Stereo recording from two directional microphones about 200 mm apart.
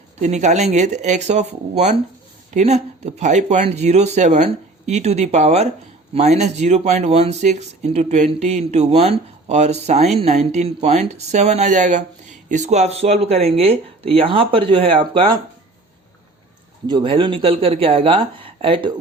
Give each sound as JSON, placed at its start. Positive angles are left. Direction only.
{"t": 0.2, "sound": "speech", "side_deg": -35}
{"t": 16.8, "sound": "speech", "side_deg": -20}